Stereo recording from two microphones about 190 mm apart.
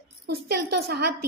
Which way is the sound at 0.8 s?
55° right (ahead or behind).